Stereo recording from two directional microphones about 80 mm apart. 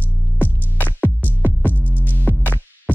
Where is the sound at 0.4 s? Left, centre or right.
Left.